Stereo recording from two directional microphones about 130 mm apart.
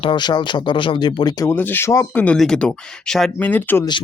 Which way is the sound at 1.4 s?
15° left (ahead or behind).